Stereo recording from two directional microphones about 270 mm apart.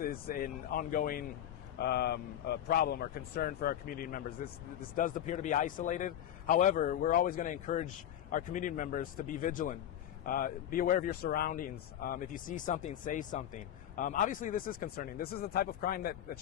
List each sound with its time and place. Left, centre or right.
0.0 s speech: left